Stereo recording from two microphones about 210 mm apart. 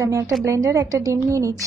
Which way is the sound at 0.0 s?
15° right (ahead or behind).